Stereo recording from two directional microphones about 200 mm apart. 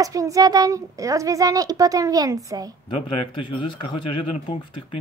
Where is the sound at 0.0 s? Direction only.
15° right (ahead or behind).